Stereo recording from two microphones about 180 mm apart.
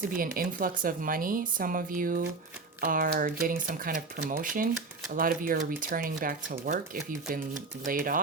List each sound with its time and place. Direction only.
0.1 s speech: 50° right (ahead or behind)